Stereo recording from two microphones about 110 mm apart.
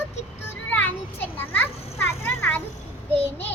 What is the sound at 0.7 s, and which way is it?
Children playing, 15° left (ahead or behind).